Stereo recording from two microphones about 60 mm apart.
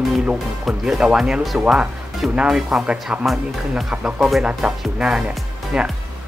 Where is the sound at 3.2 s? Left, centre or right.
Centre.